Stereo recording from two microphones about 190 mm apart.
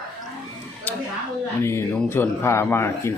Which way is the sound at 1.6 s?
15° left (ahead or behind).